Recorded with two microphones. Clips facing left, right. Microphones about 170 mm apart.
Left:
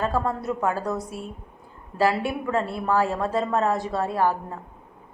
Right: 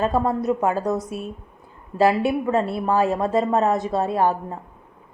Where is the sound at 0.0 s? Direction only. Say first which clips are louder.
Right 4 dB; 20° right (ahead or behind).